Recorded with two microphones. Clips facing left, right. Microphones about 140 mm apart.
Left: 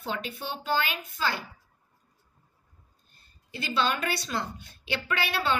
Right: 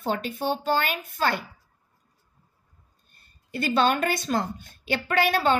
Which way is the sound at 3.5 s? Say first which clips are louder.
Right 6 dB; 50° right (ahead or behind).